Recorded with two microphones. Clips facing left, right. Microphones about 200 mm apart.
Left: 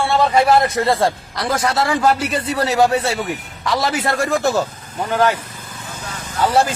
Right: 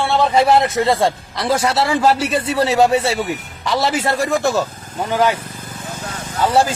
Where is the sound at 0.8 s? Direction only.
Centre (ahead or behind).